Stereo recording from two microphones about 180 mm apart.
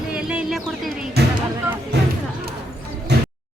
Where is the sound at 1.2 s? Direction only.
65° right (ahead or behind).